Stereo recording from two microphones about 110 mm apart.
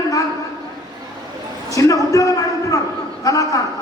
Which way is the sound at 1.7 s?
30° left (ahead or behind).